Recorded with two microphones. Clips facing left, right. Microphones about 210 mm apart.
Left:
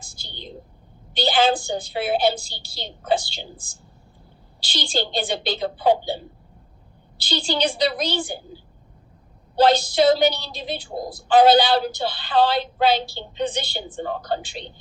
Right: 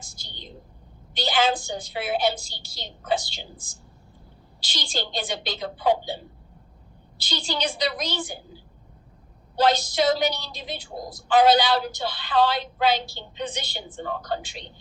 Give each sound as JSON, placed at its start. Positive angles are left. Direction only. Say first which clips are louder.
{"t": 0.0, "sound": "a sound", "louder": "left 5 dB", "side_deg": 30}
{"t": 1.1, "sound": "a woman's voice", "louder": "left 4 dB", "side_deg": 30}
{"t": 7.2, "sound": "a woman's voice", "louder": "left 5 dB", "side_deg": 30}
{"t": 9.6, "sound": "a woman's voice", "louder": "left 4 dB", "side_deg": 30}